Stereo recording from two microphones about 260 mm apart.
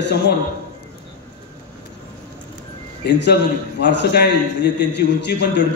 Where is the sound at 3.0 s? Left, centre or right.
Left.